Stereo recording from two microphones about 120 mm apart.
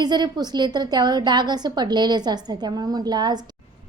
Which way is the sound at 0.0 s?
35° right (ahead or behind).